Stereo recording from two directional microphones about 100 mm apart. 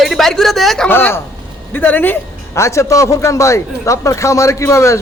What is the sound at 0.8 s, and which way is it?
A woman's voice, 20° left (ahead or behind).